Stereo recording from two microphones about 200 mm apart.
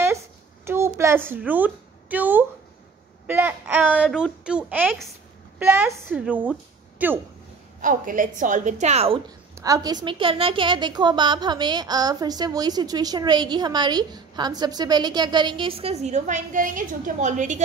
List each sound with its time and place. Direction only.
0.7 s a woman's voice: 10° right (ahead or behind)
7.8 s a woman's voice: 40° right (ahead or behind)
9.6 s a woman's voice: 15° right (ahead or behind); by 17.6 s 40° right (ahead or behind)